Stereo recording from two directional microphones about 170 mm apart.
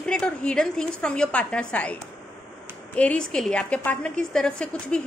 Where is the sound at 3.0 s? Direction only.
5° left (ahead or behind).